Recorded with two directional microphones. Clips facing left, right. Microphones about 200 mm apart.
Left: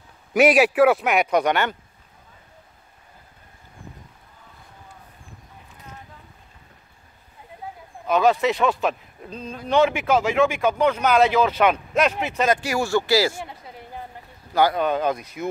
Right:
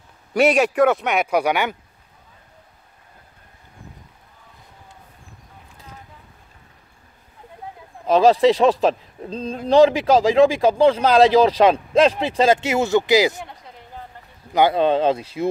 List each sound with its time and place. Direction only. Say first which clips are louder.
0.3 s speech: even; 5° left (ahead or behind)
8.1 s speech: right 5 dB; 30° right (ahead or behind)
13.4 s a sound: left 1 dB; 5° left (ahead or behind)
14.5 s speech: right 3 dB; 25° right (ahead or behind)